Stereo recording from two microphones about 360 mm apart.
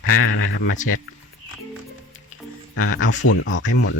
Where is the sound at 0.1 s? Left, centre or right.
Left.